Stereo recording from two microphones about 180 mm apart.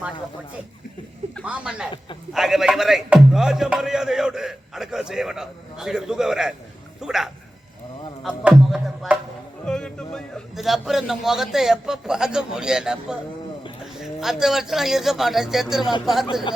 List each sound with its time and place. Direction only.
1.5 s speech: 5° right (ahead or behind)
8.4 s speech: 5° right (ahead or behind)